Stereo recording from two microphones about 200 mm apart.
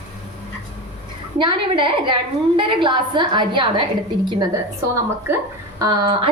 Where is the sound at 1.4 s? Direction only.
25° right (ahead or behind).